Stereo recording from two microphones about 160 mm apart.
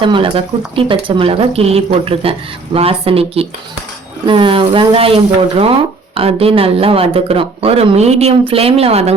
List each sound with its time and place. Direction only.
0.0 s speech: 35° right (ahead or behind)